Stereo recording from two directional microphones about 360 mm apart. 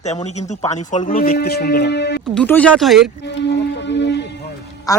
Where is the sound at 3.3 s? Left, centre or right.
Left.